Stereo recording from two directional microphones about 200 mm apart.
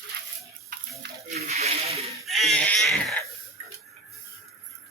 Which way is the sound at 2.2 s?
Centre (ahead or behind).